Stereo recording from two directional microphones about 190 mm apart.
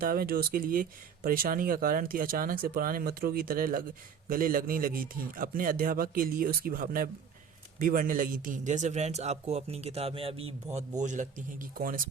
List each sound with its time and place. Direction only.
0.0 s a man's voice: 50° right (ahead or behind)